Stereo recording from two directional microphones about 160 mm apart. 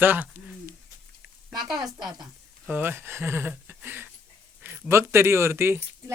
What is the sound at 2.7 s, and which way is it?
Speech, 15° right (ahead or behind).